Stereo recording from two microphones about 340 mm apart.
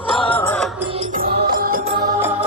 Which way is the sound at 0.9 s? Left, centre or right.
Right.